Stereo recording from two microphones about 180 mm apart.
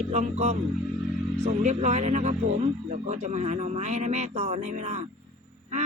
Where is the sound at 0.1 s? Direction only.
40° right (ahead or behind).